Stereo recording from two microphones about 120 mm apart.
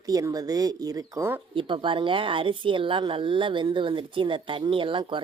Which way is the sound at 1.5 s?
45° right (ahead or behind).